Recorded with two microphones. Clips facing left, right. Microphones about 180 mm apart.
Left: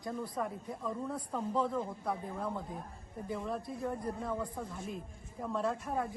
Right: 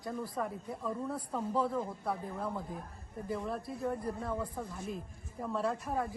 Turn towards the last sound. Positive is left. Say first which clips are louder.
# even
turn(degrees=0)  # may be behind; listen again after turning